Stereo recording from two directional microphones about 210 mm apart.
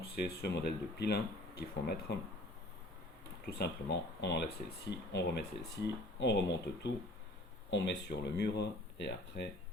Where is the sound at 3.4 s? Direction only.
50° left (ahead or behind).